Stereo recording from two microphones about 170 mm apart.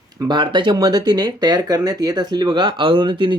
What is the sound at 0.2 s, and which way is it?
Speech, 25° right (ahead or behind).